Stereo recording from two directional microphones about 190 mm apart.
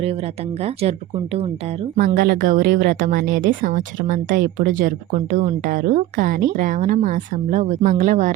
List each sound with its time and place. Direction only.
0.6 s speech: 30° right (ahead or behind)
2.0 s a woman's voice: 50° right (ahead or behind)